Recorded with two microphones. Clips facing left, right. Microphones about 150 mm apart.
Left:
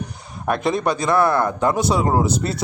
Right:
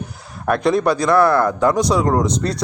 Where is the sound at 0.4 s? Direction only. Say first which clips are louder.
Right 4 dB; centre (ahead or behind).